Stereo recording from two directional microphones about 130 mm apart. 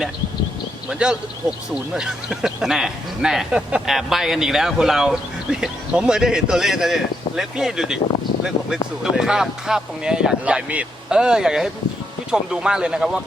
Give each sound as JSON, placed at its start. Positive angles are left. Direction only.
{"t": 0.9, "sound": "speech", "side_deg": -5}
{"t": 9.1, "sound": "speech", "side_deg": -5}